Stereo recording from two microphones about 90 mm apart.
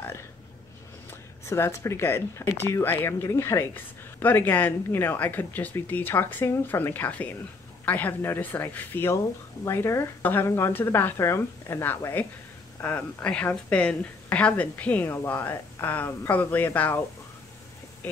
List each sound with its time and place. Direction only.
1.4 s a woman's voice: 30° left (ahead or behind)